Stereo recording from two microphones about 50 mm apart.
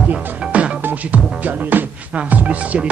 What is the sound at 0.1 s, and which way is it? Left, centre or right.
Music, right.